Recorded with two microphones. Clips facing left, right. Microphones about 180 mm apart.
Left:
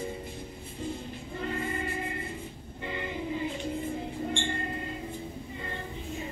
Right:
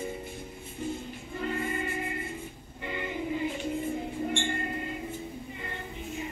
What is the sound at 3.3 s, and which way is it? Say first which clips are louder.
Music: right 1 dB; 25° right (ahead or behind).